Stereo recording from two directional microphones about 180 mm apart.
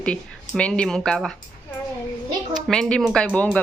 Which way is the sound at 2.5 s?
5° left (ahead or behind).